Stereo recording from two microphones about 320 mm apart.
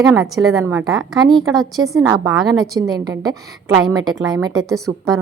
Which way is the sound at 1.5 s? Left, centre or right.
Centre.